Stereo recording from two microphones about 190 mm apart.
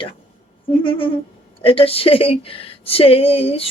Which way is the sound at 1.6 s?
30° left (ahead or behind).